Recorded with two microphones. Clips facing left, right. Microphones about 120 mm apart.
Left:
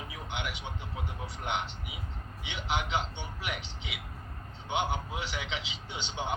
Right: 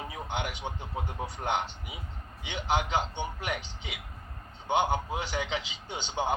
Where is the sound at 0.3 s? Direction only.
45° right (ahead or behind).